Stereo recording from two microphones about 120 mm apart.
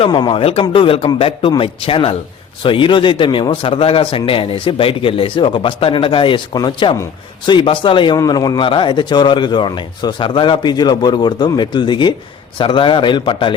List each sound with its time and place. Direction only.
0.1 s a man's voice: 40° left (ahead or behind)